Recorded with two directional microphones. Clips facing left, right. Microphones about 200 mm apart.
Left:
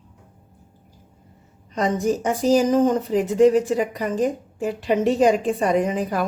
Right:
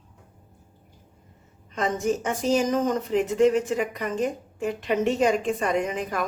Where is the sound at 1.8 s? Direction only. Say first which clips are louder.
Left 4 dB; 35° left (ahead or behind).